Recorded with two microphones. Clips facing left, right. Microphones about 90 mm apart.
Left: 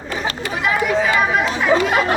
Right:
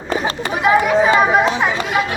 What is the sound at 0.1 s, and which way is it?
Chatter, 30° right (ahead or behind).